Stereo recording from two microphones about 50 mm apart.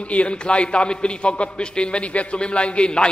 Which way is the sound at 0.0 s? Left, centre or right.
Left.